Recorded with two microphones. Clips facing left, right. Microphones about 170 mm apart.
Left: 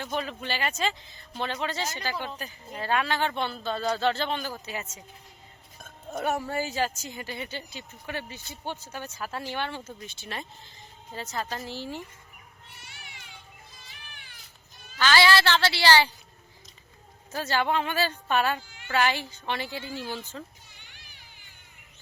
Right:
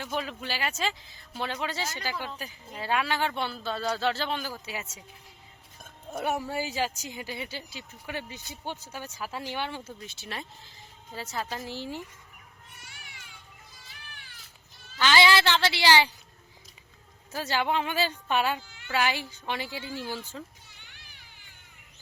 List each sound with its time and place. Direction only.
0.0 s speech: 5° right (ahead or behind)
12.8 s cat: 25° left (ahead or behind)
14.9 s speech: 15° right (ahead or behind)
17.3 s speech: 10° right (ahead or behind)